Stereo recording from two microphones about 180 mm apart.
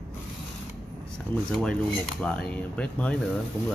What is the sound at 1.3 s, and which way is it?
Speech, 5° left (ahead or behind).